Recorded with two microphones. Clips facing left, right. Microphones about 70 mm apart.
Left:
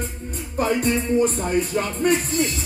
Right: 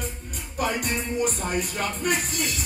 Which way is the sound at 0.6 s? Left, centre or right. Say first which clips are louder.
Left 6 dB; left.